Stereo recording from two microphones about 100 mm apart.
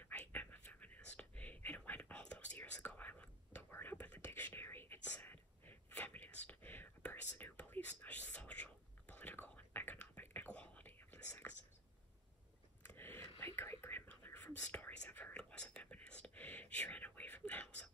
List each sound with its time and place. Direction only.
0.0 s whispering: 15° left (ahead or behind)
12.8 s whispering: 20° left (ahead or behind)